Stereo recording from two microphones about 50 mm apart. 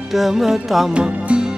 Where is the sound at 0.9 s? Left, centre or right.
Right.